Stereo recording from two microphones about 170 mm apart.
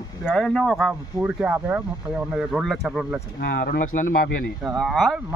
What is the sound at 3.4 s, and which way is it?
Speech, 75° left (ahead or behind).